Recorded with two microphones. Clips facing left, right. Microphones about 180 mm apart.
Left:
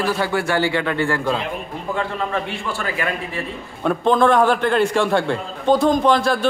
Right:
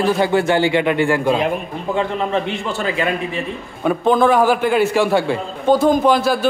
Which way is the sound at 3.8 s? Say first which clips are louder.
Right 2 dB; 5° right (ahead or behind).